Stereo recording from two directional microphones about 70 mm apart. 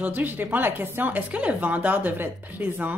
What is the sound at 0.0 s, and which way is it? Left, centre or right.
Speech, right.